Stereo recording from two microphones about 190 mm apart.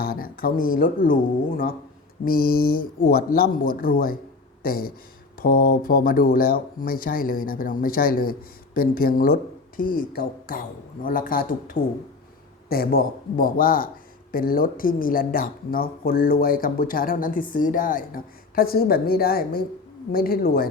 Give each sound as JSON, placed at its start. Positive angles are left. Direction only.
{"t": 0.0, "sound": "speech", "side_deg": 50}